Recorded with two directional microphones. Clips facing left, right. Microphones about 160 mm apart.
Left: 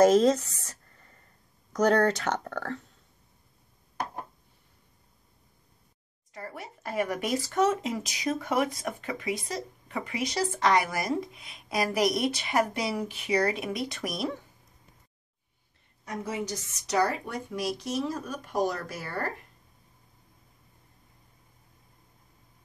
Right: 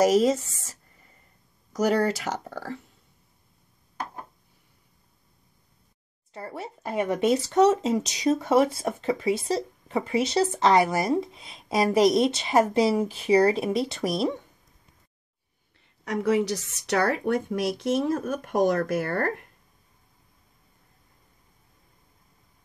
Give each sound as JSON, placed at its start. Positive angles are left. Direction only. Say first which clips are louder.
{"t": 0.0, "sound": "speech", "louder": "even", "side_deg": -5}
{"t": 0.7, "sound": "a sound", "louder": "even", "side_deg": -10}
{"t": 1.7, "sound": "speech", "louder": "even", "side_deg": -5}
{"t": 6.3, "sound": "speech", "louder": "right 5 dB", "side_deg": -30}
{"t": 7.7, "sound": "speech", "louder": "right 7 dB", "side_deg": -35}
{"t": 16.0, "sound": "speech", "louder": "right 10 dB", "side_deg": -75}